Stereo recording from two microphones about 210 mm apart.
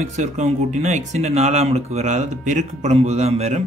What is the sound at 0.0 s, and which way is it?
Speech, 35° right (ahead or behind).